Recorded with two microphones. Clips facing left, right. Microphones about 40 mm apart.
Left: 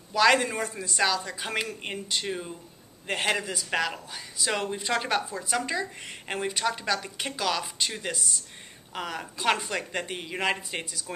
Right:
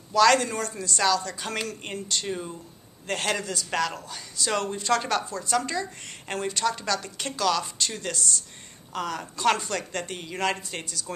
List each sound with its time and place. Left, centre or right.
0.1 s speech: centre